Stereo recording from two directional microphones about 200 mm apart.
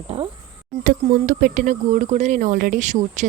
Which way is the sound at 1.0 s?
40° right (ahead or behind).